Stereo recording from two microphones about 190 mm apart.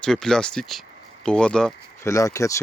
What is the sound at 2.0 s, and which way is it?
Speech, 15° left (ahead or behind).